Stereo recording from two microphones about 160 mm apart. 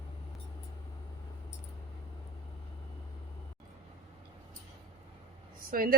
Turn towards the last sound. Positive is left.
turn(degrees=-65)  # may be behind; listen again after turning